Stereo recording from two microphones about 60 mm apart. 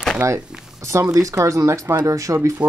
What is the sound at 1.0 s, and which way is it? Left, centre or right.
Speech, right.